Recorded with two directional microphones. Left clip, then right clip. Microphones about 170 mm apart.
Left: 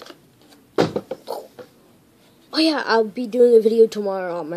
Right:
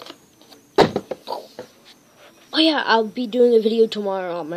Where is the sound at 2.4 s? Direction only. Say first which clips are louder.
Right 2 dB; 10° right (ahead or behind).